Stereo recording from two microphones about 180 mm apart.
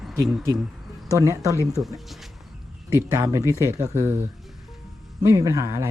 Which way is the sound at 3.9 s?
15° right (ahead or behind).